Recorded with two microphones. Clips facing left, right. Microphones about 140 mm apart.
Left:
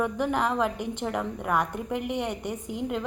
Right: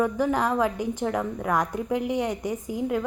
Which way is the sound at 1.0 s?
5° left (ahead or behind).